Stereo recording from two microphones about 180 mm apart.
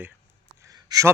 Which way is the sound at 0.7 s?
20° right (ahead or behind).